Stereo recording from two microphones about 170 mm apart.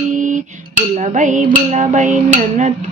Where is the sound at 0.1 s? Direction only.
50° right (ahead or behind).